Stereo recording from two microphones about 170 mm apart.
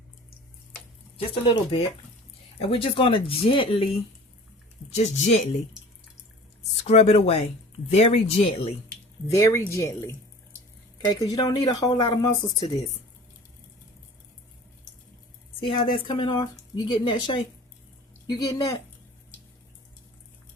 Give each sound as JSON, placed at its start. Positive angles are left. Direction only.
{"t": 1.3, "sound": "speech", "side_deg": 35}
{"t": 4.9, "sound": "speech", "side_deg": 40}
{"t": 6.8, "sound": "speech", "side_deg": 40}
{"t": 9.2, "sound": "speech", "side_deg": 15}
{"t": 15.6, "sound": "speech", "side_deg": 30}